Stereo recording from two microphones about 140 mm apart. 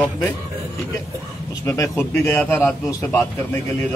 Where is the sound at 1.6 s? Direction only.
15° left (ahead or behind).